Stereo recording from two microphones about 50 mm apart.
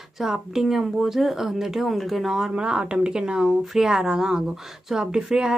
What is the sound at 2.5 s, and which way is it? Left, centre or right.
Speech, centre.